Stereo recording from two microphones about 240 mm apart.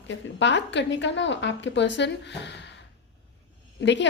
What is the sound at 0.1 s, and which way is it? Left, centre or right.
Speech, left.